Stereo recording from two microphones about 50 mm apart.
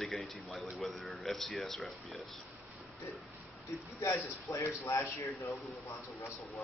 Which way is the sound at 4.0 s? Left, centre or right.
Left.